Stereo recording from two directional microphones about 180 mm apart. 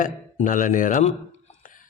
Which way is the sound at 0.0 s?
45° left (ahead or behind).